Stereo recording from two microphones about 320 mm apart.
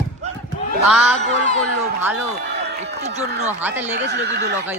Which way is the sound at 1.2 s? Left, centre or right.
Left.